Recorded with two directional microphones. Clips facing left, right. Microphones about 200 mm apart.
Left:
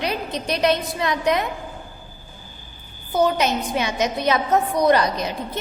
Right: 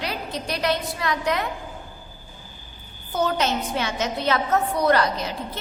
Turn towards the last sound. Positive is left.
turn(degrees=15)  # may be behind; listen again after turning